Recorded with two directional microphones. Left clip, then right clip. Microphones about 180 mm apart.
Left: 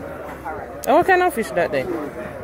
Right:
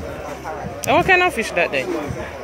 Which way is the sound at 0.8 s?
35° left (ahead or behind).